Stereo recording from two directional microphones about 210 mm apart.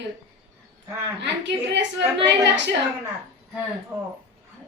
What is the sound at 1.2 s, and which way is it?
Speech, 55° right (ahead or behind).